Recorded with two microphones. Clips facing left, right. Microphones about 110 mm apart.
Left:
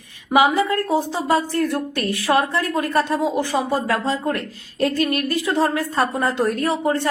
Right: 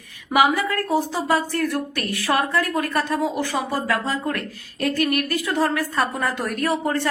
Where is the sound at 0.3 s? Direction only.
25° left (ahead or behind).